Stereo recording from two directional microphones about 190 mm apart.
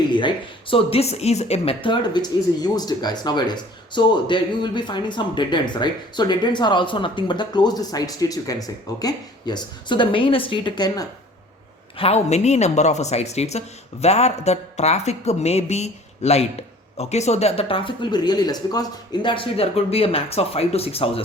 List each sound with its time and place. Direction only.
0.1 s speech: 25° left (ahead or behind)
11.9 s speech: 35° left (ahead or behind)